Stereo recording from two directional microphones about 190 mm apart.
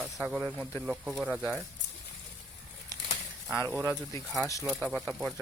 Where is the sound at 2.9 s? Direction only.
15° left (ahead or behind).